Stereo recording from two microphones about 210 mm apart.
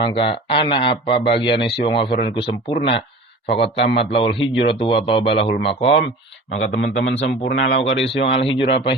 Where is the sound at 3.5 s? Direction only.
50° left (ahead or behind).